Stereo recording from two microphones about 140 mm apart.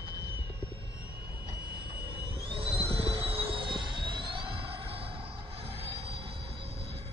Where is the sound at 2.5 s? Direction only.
40° right (ahead or behind).